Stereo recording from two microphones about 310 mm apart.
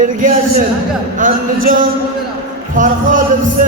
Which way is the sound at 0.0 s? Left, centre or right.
Right.